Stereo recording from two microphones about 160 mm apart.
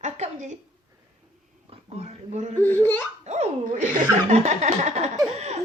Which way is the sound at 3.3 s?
45° right (ahead or behind).